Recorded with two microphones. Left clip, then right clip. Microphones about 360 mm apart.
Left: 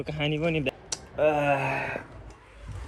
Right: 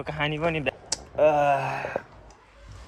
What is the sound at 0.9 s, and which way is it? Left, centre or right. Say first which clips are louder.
Speech: right 4 dB; centre.